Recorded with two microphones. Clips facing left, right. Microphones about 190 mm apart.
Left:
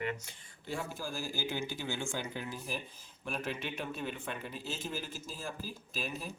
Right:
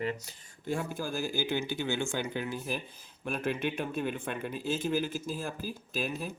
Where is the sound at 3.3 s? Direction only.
55° right (ahead or behind).